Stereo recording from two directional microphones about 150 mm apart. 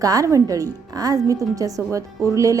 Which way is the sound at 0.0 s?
25° right (ahead or behind).